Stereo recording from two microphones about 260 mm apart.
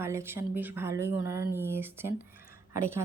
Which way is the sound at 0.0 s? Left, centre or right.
Centre.